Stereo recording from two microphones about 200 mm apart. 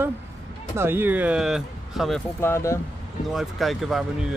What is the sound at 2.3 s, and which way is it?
Speech, 15° left (ahead or behind).